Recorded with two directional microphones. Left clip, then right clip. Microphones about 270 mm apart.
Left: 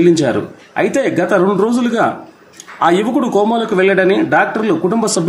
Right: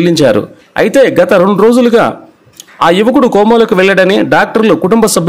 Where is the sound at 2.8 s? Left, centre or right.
Right.